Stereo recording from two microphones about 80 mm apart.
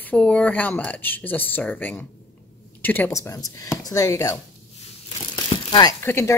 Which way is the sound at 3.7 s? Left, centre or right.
Left.